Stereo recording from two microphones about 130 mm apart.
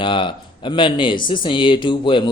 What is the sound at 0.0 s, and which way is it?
Speech, 40° left (ahead or behind).